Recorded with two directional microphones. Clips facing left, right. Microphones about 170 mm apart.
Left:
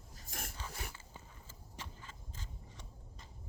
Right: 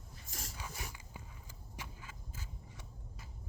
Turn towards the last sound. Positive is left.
turn(degrees=-10)  # may be behind; listen again after turning